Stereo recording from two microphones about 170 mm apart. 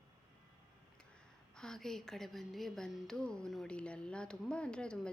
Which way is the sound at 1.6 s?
5° left (ahead or behind).